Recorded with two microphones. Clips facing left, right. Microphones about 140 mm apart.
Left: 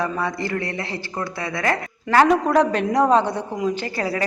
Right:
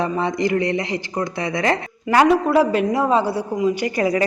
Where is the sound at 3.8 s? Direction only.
15° right (ahead or behind).